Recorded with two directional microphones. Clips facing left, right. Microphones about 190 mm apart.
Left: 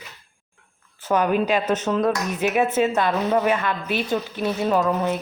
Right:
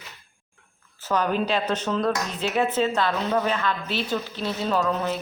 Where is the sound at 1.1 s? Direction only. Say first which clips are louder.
Left 4 dB; 10° left (ahead or behind).